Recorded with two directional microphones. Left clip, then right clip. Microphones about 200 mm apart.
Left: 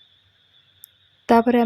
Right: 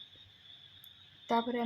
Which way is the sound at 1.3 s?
50° left (ahead or behind).